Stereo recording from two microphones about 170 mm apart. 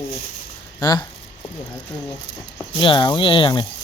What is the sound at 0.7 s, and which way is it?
Speech, 25° left (ahead or behind).